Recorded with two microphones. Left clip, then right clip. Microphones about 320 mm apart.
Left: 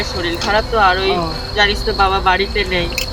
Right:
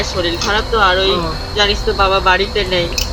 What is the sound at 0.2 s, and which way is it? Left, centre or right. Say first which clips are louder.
Speech: even; centre.